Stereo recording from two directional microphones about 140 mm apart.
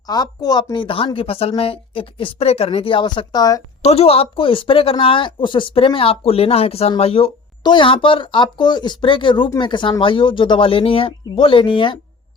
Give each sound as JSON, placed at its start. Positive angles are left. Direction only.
{"t": 0.1, "sound": "a woman's voice", "side_deg": 30}
{"t": 3.8, "sound": "a woman's voice", "side_deg": 45}